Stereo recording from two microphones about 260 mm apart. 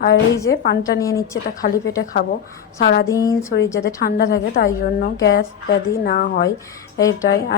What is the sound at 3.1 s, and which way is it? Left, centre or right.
Speech, centre.